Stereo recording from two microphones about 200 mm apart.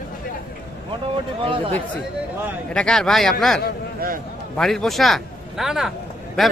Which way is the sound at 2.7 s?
5° left (ahead or behind).